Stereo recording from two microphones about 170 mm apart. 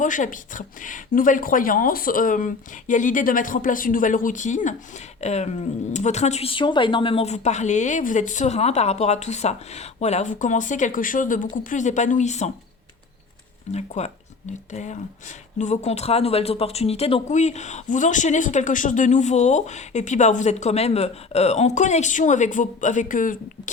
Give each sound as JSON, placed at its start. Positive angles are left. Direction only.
{"t": 0.0, "sound": "speech", "side_deg": 50}
{"t": 13.7, "sound": "speech", "side_deg": 40}